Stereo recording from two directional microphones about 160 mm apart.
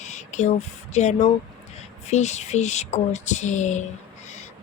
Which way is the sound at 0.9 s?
45° left (ahead or behind).